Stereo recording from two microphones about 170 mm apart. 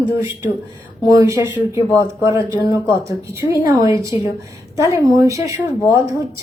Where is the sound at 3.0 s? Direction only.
15° right (ahead or behind).